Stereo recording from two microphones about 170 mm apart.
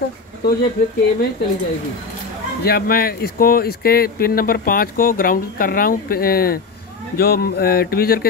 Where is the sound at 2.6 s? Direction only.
65° left (ahead or behind).